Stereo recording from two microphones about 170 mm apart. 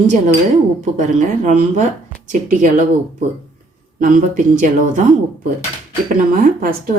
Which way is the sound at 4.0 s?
50° right (ahead or behind).